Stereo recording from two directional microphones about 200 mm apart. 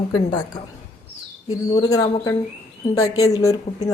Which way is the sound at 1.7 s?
20° left (ahead or behind).